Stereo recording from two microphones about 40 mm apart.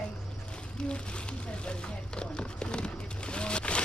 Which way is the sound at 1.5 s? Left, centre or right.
Left.